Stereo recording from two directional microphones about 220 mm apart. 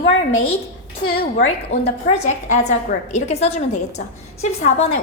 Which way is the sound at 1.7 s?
30° left (ahead or behind).